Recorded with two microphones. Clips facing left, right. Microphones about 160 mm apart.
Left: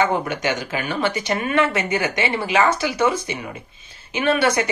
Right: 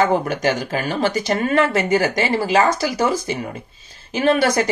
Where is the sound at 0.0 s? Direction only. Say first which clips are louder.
Right 3 dB; 40° right (ahead or behind).